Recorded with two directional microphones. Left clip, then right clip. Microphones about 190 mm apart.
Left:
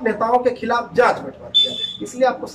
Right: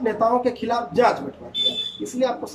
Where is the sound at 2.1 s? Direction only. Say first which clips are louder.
Left 5 dB; 15° right (ahead or behind).